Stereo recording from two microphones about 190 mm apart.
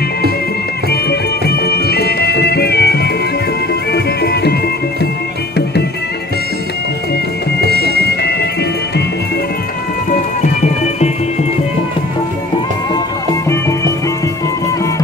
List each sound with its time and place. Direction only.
1.4 s music: 55° left (ahead or behind)
7.6 s music: 55° right (ahead or behind)
8.2 s music: 60° left (ahead or behind)
13.5 s music: 15° left (ahead or behind)